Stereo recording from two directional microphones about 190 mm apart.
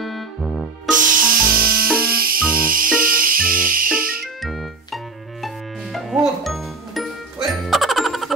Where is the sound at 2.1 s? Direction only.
50° right (ahead or behind).